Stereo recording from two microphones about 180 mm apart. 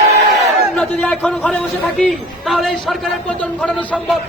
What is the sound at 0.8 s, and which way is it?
A man's voice, 5° left (ahead or behind).